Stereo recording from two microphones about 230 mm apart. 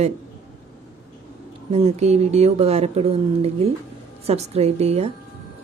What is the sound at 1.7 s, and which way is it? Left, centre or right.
A woman's voice, right.